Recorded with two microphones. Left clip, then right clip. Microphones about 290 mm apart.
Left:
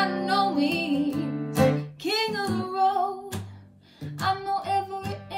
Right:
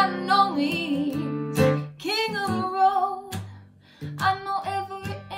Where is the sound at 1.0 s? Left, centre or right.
Centre.